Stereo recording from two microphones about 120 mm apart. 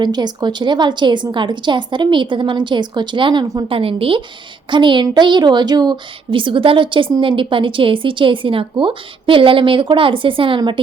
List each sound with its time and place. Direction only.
0.0 s a woman's voice: 35° right (ahead or behind)